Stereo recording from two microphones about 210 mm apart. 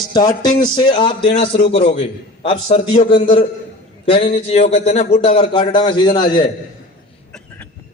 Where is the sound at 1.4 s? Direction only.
50° left (ahead or behind).